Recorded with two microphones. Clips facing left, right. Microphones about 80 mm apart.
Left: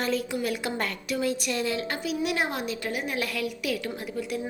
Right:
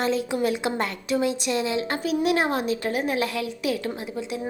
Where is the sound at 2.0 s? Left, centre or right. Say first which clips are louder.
Right 6 dB; right.